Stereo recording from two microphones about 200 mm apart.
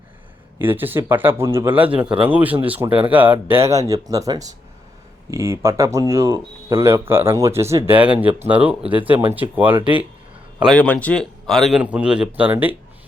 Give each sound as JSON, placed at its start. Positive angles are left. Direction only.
{"t": 0.6, "sound": "a man's voice", "side_deg": -10}
{"t": 10.6, "sound": "a man's voice", "side_deg": 5}